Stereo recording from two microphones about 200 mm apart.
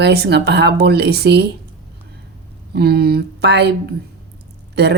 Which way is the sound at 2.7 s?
50° right (ahead or behind).